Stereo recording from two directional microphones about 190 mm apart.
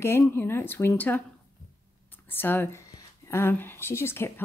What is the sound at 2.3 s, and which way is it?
Speech, 10° left (ahead or behind).